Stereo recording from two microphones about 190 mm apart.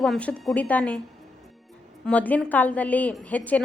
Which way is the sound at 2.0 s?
10° left (ahead or behind).